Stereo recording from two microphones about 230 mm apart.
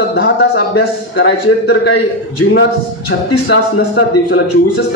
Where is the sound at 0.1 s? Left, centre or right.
Left.